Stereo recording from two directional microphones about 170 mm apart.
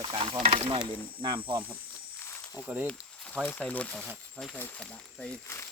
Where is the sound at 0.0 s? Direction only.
35° right (ahead or behind).